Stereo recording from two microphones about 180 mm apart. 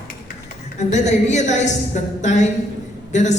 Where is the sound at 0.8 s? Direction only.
40° left (ahead or behind).